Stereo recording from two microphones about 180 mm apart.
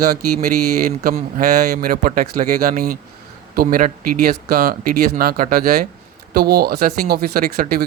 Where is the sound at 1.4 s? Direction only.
55° right (ahead or behind).